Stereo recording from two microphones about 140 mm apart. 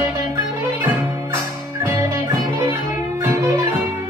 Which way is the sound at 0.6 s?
20° right (ahead or behind).